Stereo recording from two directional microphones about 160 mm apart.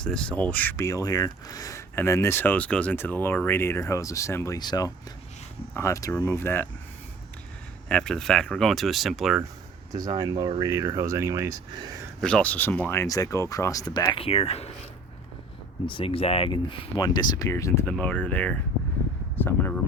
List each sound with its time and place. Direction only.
0.0 s speech: 5° left (ahead or behind)
7.9 s speech: 5° left (ahead or behind)
10.1 s speech: 25° right (ahead or behind)
12.2 s speech: 10° left (ahead or behind); by 14.7 s 40° left (ahead or behind)
15.9 s speech: 35° left (ahead or behind); by 19.8 s 15° left (ahead or behind)